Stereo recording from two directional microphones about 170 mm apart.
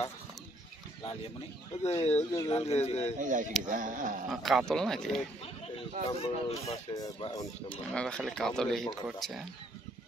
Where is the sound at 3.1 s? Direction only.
50° right (ahead or behind).